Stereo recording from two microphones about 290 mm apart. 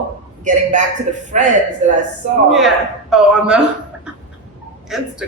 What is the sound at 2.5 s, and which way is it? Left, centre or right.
A woman's voice, centre.